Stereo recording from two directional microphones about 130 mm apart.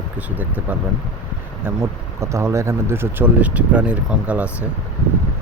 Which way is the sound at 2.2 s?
20° right (ahead or behind).